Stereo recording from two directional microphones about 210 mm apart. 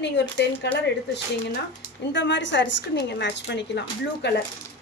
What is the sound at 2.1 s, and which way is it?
A woman's voice, 60° left (ahead or behind).